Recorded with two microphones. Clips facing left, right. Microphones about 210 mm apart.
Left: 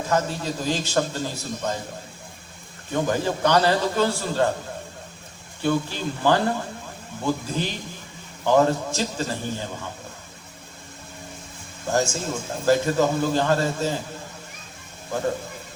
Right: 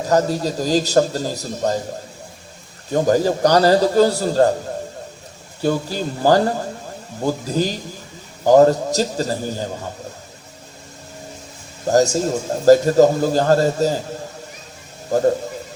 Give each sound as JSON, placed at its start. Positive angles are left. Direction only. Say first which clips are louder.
{"t": 0.0, "sound": "a man's voice", "louder": "right 7 dB", "side_deg": -40}
{"t": 2.9, "sound": "a man's voice", "louder": "right 7 dB", "side_deg": -40}
{"t": 5.6, "sound": "a man's voice", "louder": "right 3 dB", "side_deg": -40}
{"t": 11.9, "sound": "a man's voice", "louder": "right 8 dB", "side_deg": -40}
{"t": 15.1, "sound": "a man's voice", "louder": "right 9 dB", "side_deg": -40}